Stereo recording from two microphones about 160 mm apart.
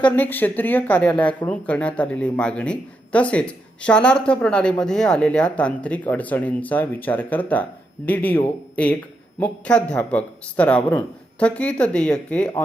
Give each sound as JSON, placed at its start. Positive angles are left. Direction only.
{"t": 0.0, "sound": "speech", "side_deg": 10}